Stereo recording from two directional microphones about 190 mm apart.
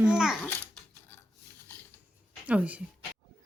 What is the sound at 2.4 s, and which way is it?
Speech, 5° right (ahead or behind).